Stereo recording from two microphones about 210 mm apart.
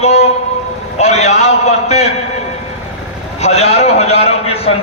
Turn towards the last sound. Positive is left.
turn(degrees=30)  # may be behind; listen again after turning